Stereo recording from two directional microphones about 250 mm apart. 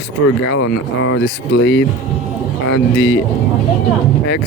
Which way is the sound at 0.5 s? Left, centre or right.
Left.